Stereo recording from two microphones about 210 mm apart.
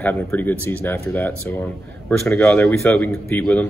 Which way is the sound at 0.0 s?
5° left (ahead or behind).